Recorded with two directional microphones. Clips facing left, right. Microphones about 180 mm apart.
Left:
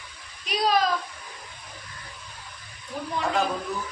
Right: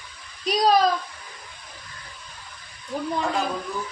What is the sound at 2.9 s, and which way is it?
Speech, 45° right (ahead or behind).